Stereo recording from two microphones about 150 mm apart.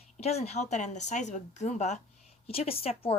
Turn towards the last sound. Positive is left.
turn(degrees=40)  # may be behind; listen again after turning